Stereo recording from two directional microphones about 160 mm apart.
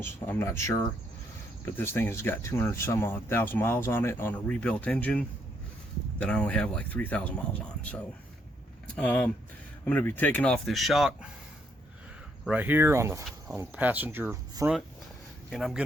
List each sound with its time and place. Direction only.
0.0 s speech: 15° left (ahead or behind)
6.2 s speech: 5° left (ahead or behind)
12.5 s speech: 10° right (ahead or behind)
15.4 s speech: centre (ahead or behind)